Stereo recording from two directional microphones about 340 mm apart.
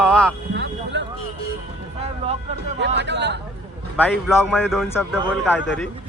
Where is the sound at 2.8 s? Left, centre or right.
Right.